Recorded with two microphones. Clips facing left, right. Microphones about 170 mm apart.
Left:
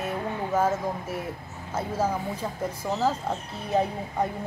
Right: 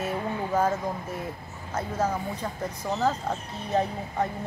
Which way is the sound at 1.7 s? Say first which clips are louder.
Left 1 dB; 10° left (ahead or behind).